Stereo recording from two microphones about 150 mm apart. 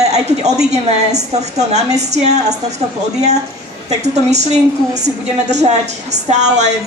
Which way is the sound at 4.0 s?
50° right (ahead or behind).